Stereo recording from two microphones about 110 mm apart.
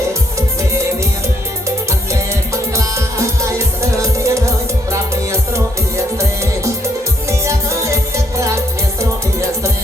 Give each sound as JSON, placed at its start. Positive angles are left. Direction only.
{"t": 3.8, "sound": "music", "side_deg": -25}
{"t": 7.3, "sound": "music", "side_deg": -25}